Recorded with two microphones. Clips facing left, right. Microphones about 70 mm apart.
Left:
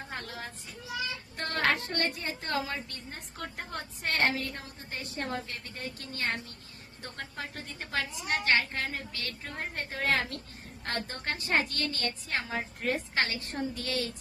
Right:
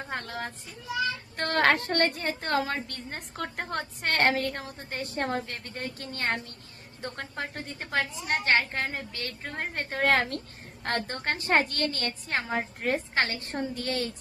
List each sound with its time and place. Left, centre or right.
0.1 s speech: right
1.4 s a woman's voice: right